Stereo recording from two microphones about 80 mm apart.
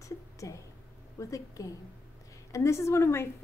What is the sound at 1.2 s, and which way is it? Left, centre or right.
A woman's voice, left.